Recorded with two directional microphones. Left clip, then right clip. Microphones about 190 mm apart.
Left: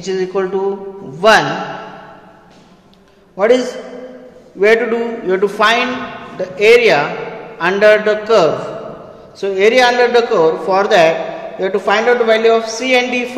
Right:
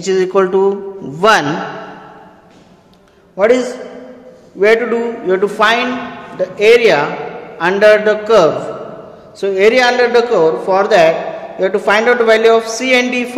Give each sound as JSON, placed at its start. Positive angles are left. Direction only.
{"t": 0.0, "sound": "a sound", "side_deg": -45}
{"t": 3.3, "sound": "a man's voice", "side_deg": -15}
{"t": 11.6, "sound": "a man's voice", "side_deg": -25}